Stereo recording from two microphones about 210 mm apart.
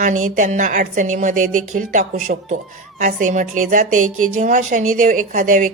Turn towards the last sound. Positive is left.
turn(degrees=-40)  # may be behind; listen again after turning